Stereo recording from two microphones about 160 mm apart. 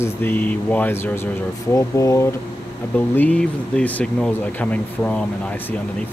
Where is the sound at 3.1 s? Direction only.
10° left (ahead or behind).